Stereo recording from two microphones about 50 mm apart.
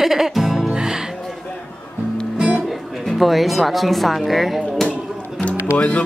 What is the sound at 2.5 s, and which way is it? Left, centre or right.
Speech, centre.